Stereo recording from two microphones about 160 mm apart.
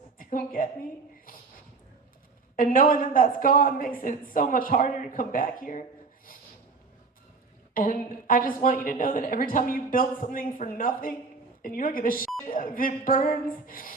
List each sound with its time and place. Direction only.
0.2 s a woman's voice: 60° left (ahead or behind)
2.6 s a woman's voice: 60° left (ahead or behind)
7.7 s a woman's voice: 60° left (ahead or behind)
12.2 s beep: centre (ahead or behind)
12.5 s a woman's voice: 60° left (ahead or behind)